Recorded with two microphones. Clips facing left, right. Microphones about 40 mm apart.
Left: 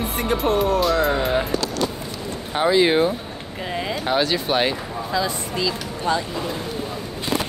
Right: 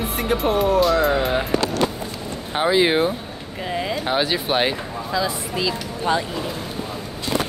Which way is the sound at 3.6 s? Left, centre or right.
Centre.